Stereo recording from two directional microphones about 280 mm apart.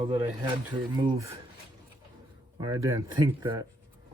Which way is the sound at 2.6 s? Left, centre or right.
Centre.